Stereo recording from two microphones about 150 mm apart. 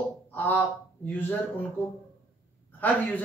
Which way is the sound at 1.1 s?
15° left (ahead or behind).